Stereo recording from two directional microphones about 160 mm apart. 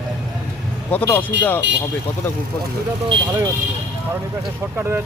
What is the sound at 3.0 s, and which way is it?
Speech, 20° right (ahead or behind).